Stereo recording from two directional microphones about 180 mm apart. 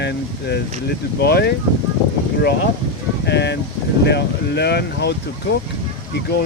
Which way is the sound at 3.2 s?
70° left (ahead or behind).